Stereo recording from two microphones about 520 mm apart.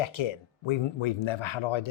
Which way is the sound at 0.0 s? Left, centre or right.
Left.